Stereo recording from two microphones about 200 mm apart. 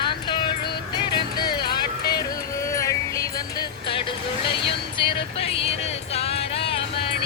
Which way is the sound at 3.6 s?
25° left (ahead or behind).